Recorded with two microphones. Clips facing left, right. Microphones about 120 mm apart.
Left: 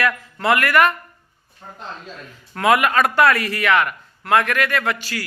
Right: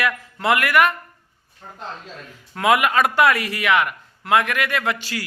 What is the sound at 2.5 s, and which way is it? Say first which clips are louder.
A man's voice: left 1 dB; 15° right (ahead or behind).